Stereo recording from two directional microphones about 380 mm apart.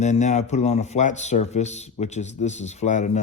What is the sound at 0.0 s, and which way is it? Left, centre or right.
Speech, centre.